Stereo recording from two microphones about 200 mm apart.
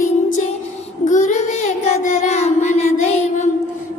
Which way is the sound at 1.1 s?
35° left (ahead or behind).